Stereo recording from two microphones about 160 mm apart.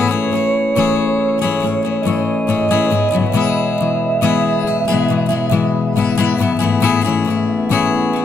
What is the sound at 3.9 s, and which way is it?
Music, 15° left (ahead or behind).